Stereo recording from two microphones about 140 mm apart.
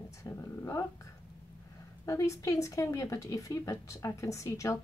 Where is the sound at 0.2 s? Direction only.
20° left (ahead or behind).